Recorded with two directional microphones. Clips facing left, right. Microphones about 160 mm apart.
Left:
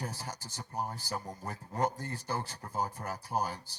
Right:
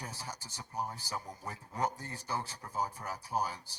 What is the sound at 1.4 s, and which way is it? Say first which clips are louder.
Speech: left 3 dB; 50° left (ahead or behind).